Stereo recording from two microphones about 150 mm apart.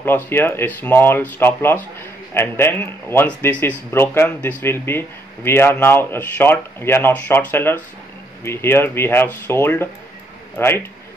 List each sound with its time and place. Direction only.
0.0 s speech: 15° left (ahead or behind)